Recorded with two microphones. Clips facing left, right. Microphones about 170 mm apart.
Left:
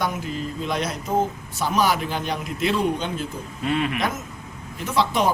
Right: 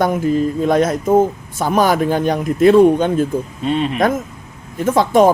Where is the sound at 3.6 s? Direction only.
25° right (ahead or behind).